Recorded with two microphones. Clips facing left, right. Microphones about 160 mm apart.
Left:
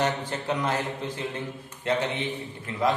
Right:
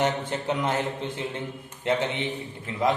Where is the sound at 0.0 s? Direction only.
20° right (ahead or behind).